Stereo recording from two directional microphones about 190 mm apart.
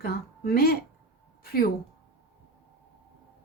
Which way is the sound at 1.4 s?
55° left (ahead or behind).